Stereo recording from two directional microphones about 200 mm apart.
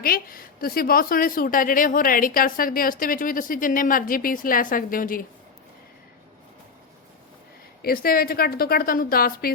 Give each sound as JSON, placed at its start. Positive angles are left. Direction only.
{"t": 0.0, "sound": "a woman's voice", "side_deg": 45}
{"t": 7.8, "sound": "a woman's voice", "side_deg": 50}